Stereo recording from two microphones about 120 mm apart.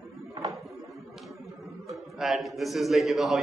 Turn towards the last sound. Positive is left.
turn(degrees=0)  # may be behind; listen again after turning